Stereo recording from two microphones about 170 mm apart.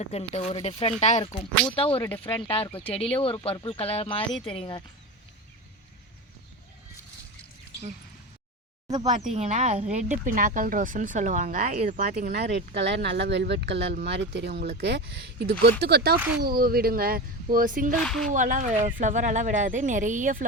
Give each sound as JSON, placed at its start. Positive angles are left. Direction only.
{"t": 0.0, "sound": "speech", "side_deg": 40}
{"t": 9.3, "sound": "speech", "side_deg": -40}
{"t": 12.3, "sound": "speech", "side_deg": -85}
{"t": 16.4, "sound": "speech", "side_deg": -60}
{"t": 17.9, "sound": "speech", "side_deg": 0}
{"t": 18.3, "sound": "speech", "side_deg": -50}